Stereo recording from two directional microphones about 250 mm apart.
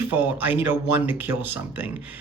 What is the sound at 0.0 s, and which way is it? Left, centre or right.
Speech, centre.